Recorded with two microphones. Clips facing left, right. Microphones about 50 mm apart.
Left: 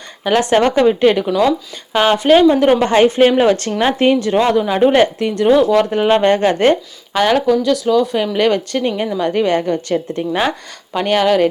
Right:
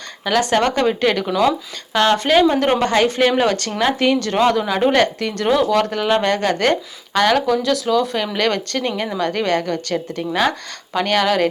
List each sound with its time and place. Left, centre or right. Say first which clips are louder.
0.3 s speech: left 4 dB; centre
1.3 s speech: left 4 dB; centre
1.9 s speech: left 4 dB; centre
2.8 s speech: left 5 dB; left
7.1 s speech: left 2 dB; centre